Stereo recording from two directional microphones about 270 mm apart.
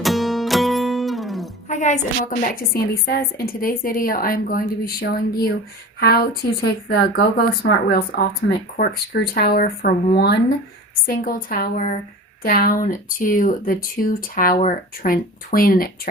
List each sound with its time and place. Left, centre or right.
0.0 s music: centre
1.6 s a sound: left
2.4 s speech: left